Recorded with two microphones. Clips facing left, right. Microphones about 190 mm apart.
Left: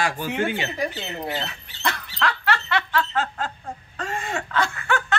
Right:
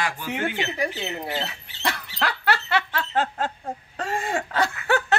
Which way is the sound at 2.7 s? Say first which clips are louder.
Left 1 dB; 30° right (ahead or behind).